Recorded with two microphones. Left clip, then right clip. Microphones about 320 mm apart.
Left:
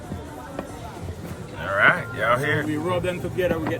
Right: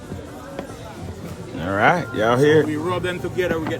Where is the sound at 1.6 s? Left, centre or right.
Centre.